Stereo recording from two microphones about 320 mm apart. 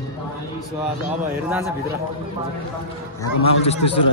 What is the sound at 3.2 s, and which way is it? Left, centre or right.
Speech, centre.